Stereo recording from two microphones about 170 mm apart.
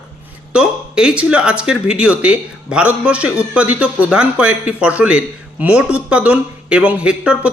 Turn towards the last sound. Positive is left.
turn(degrees=-5)  # may be behind; listen again after turning